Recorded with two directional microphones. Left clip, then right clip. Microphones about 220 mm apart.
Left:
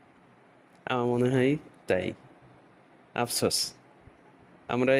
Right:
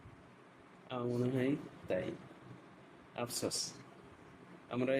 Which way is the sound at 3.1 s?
40° left (ahead or behind).